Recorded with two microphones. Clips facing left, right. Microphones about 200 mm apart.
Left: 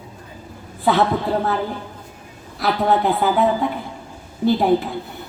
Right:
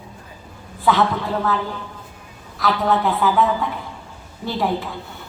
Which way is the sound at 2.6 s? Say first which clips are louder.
Left 1 dB; 35° left (ahead or behind).